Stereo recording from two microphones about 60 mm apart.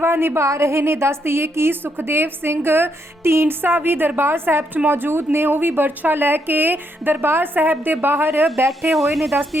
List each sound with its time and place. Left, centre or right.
0.0 s a woman's voice: right
0.4 s a woman's voice: right
8.8 s speech: centre